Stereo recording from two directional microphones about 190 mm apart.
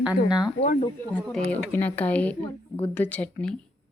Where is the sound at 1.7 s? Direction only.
10° left (ahead or behind).